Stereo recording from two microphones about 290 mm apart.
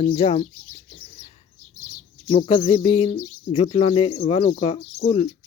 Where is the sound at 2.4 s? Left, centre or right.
Centre.